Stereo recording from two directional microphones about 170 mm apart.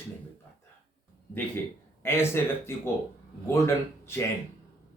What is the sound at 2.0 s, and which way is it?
Speech, 15° left (ahead or behind).